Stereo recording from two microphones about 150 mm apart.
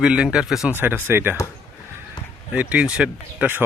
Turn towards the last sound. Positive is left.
turn(degrees=-10)  # may be behind; listen again after turning